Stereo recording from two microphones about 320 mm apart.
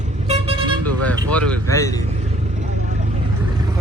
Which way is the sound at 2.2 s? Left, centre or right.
Right.